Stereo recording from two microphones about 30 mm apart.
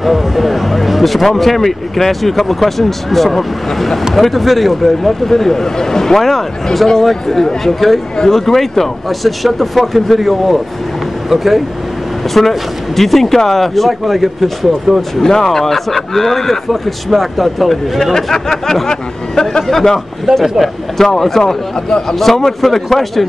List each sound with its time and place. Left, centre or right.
0.0 s speech: centre
5.3 s speech: centre
15.0 s speech: centre
18.1 s speech: centre
20.3 s speech: right
21.0 s speech: centre